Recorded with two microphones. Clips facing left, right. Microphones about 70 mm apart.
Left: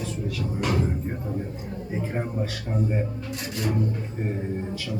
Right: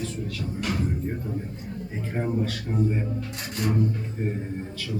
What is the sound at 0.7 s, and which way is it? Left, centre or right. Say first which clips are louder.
Speech: left 2 dB; left.